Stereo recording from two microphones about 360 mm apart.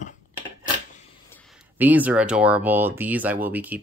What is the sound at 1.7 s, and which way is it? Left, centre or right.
Speech, centre.